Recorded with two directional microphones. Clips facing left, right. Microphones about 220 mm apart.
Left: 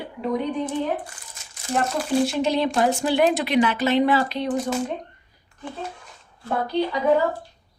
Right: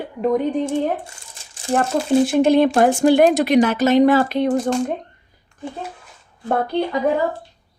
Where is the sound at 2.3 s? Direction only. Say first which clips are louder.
Right 8 dB; 50° right (ahead or behind).